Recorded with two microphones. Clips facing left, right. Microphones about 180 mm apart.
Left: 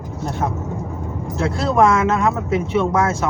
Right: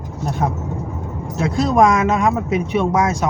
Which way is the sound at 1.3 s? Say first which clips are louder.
Right 2 dB; 15° right (ahead or behind).